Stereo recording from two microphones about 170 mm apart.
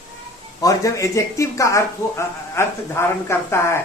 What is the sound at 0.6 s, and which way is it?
Speech, 20° left (ahead or behind).